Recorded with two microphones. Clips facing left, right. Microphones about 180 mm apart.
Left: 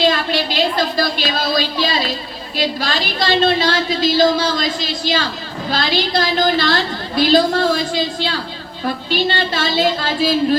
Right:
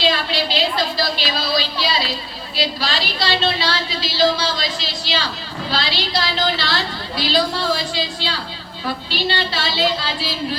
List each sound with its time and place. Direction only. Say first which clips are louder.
0.0 s a woman's voice: left 4 dB; 50° left (ahead or behind)